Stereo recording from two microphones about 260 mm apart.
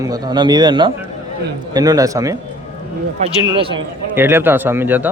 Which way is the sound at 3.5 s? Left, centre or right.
Centre.